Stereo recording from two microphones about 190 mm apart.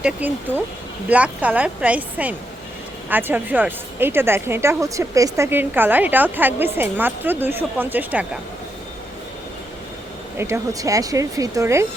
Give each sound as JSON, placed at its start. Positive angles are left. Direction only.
{"t": 0.0, "sound": "a woman's voice", "side_deg": -10}
{"t": 10.3, "sound": "a woman's voice", "side_deg": -15}